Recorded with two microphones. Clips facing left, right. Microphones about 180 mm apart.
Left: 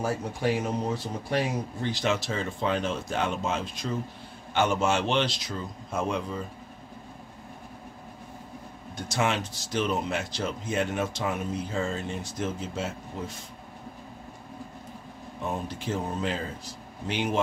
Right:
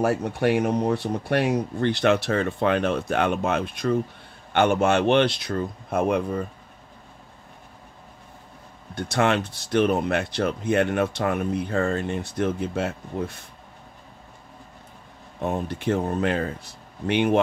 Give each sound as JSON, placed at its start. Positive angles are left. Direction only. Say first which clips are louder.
{"t": 0.0, "sound": "speech", "louder": "right 6 dB", "side_deg": -65}
{"t": 8.9, "sound": "speech", "louder": "right 6 dB", "side_deg": -60}
{"t": 15.4, "sound": "speech", "louder": "right 7 dB", "side_deg": -60}